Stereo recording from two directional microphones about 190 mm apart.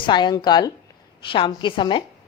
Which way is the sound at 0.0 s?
25° left (ahead or behind).